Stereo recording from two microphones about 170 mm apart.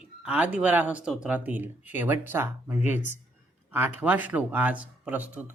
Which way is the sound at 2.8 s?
45° left (ahead or behind).